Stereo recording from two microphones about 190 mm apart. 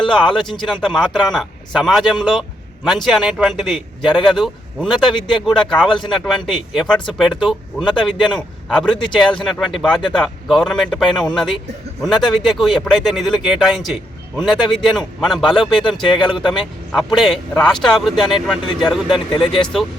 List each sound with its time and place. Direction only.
0.6 s speech: centre (ahead or behind)
5.1 s speech: 25° left (ahead or behind)
5.5 s speech: centre (ahead or behind)
5.9 s speech: 25° left (ahead or behind)
6.2 s speech: centre (ahead or behind)
15.8 s speech: 25° left (ahead or behind)
16.4 s speech: centre (ahead or behind)